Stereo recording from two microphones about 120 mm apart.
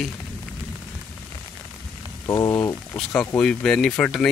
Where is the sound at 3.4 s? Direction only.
5° left (ahead or behind).